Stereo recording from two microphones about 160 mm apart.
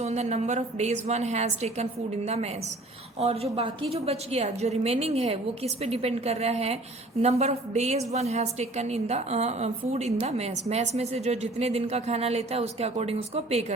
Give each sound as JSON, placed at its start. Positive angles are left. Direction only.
{"t": 0.0, "sound": "a woman's voice", "side_deg": -45}